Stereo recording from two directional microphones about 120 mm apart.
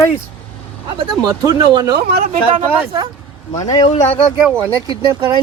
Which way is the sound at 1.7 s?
35° right (ahead or behind).